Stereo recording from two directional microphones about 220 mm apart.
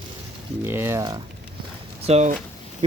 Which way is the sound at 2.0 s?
30° right (ahead or behind).